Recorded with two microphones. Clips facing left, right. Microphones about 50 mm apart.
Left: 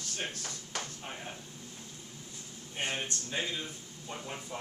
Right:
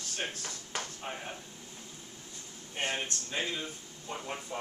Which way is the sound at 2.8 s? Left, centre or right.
Centre.